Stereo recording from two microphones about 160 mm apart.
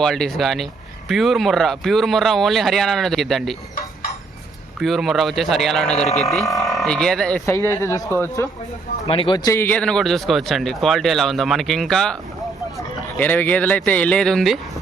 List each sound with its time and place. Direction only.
0.0 s speech: centre (ahead or behind)
4.8 s speech: centre (ahead or behind)
7.4 s speech: 15° left (ahead or behind)
9.0 s speech: 35° left (ahead or behind); by 12.1 s 5° left (ahead or behind)
13.1 s speech: 10° left (ahead or behind)